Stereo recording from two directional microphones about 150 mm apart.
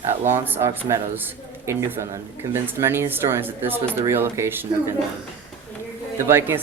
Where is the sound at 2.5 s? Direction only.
15° right (ahead or behind).